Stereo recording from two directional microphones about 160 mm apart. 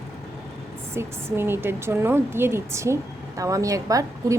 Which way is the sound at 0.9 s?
15° right (ahead or behind).